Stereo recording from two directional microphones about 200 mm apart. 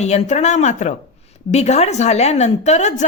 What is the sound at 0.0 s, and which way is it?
A woman's voice, 35° left (ahead or behind).